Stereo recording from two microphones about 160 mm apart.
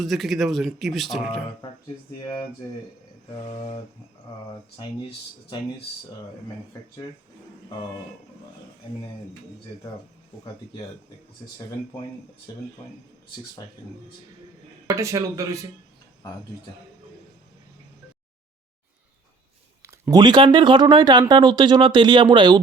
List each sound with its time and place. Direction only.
0.0 s speech: centre (ahead or behind)
2.2 s speech: 30° left (ahead or behind)
14.8 s speech: 20° right (ahead or behind)
19.8 s speech: 20° right (ahead or behind)